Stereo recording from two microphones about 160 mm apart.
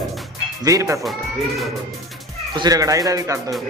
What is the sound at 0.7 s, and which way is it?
Speech, 20° right (ahead or behind).